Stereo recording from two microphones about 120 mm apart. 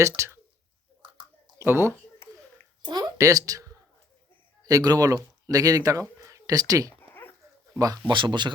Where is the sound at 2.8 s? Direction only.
30° right (ahead or behind).